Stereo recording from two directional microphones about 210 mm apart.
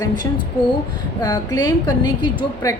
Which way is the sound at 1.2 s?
15° left (ahead or behind).